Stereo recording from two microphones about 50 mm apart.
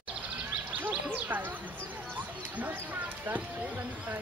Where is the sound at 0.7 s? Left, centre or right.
Right.